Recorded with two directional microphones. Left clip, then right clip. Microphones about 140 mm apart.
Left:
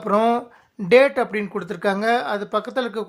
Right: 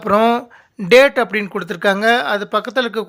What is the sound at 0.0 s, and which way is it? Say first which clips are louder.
Speech: right 5 dB; 20° right (ahead or behind).